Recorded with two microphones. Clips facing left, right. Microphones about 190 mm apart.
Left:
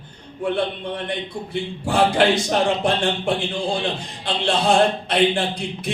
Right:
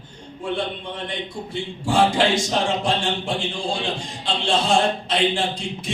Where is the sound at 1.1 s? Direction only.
60° left (ahead or behind).